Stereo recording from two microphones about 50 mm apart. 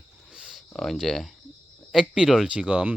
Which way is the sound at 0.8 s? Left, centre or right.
Centre.